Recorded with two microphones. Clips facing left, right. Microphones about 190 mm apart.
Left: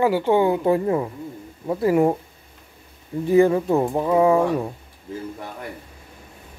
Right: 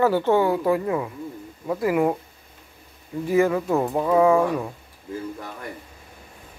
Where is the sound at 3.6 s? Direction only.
20° left (ahead or behind).